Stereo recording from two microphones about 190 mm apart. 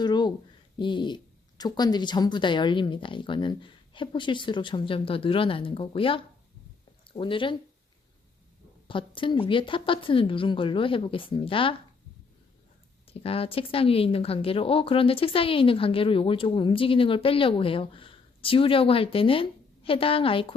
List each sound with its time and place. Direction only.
0.0 s a sound: 20° left (ahead or behind)
0.8 s a woman's voice: 25° left (ahead or behind)
8.9 s a woman's voice: 25° left (ahead or behind)
13.1 s a woman's voice: 30° left (ahead or behind)